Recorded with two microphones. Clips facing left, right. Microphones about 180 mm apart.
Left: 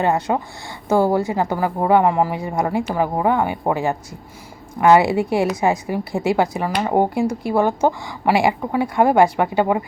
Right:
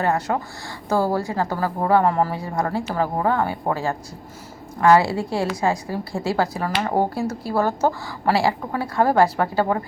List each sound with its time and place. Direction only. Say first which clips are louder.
0.0 s a woman's voice: left 3 dB; 20° left (ahead or behind)